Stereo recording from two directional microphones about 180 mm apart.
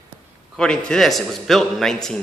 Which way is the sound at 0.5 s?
5° left (ahead or behind).